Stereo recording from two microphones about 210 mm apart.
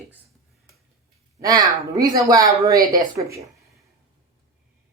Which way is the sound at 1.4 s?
15° right (ahead or behind).